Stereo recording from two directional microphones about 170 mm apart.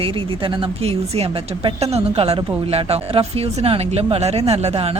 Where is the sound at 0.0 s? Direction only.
30° right (ahead or behind).